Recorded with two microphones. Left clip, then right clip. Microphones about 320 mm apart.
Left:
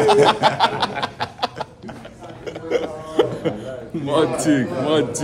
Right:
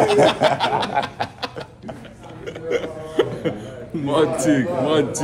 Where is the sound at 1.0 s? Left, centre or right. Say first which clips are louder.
Even; left.